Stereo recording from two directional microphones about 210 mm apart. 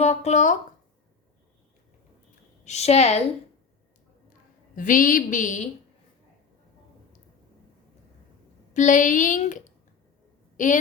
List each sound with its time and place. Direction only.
0.0 s a woman's voice: 30° left (ahead or behind)
2.6 s a woman's voice: 30° left (ahead or behind)
4.7 s a woman's voice: 40° left (ahead or behind)
8.7 s a woman's voice: 35° left (ahead or behind)